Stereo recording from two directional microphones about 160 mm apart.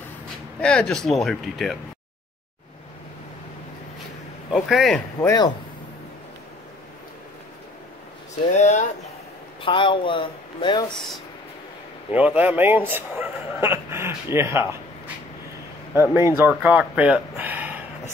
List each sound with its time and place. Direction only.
0.6 s speech: 5° left (ahead or behind)
4.5 s speech: centre (ahead or behind)
5.2 s speech: 25° left (ahead or behind)
8.5 s speech: 45° left (ahead or behind)
9.6 s speech: 30° left (ahead or behind)
12.1 s speech: 10° right (ahead or behind)
16.0 s speech: 15° right (ahead or behind)